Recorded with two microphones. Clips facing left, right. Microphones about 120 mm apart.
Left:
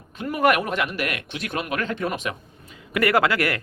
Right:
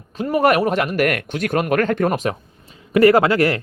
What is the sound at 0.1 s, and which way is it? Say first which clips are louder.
Speech: right 4 dB; 35° right (ahead or behind).